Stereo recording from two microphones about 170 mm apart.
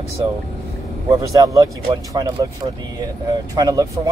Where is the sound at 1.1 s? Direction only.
20° right (ahead or behind).